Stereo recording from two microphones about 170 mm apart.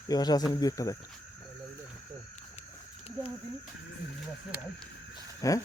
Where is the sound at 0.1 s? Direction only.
25° left (ahead or behind).